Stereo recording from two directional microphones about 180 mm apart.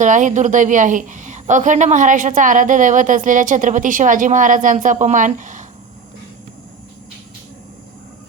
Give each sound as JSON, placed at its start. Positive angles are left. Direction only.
{"t": 0.0, "sound": "a woman's voice", "side_deg": -45}